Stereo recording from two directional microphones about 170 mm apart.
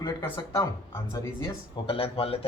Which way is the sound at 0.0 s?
20° left (ahead or behind).